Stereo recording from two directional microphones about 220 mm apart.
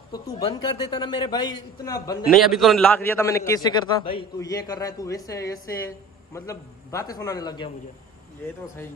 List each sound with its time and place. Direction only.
0.1 s a man's voice: 20° left (ahead or behind)
2.6 s a man's voice: centre (ahead or behind); by 7.7 s 20° left (ahead or behind)